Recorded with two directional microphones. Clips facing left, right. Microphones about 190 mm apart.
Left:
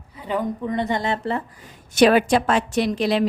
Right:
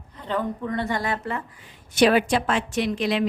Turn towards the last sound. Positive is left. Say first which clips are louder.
# left 3 dB
turn(degrees=35)  # may be behind; listen again after turning